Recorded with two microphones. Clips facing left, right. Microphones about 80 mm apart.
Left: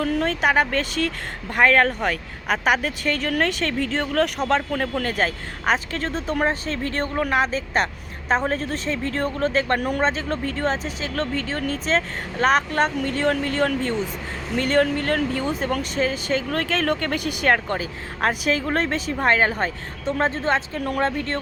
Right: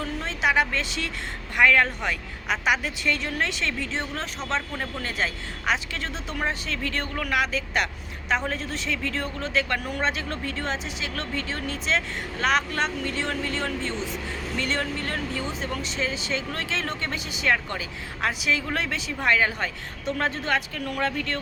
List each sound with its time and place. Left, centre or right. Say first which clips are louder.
0.0 s speech: left 5 dB; left
5.0 s speech: left 5 dB; left